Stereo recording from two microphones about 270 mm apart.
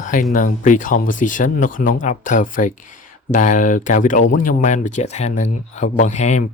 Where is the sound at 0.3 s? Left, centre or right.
Left.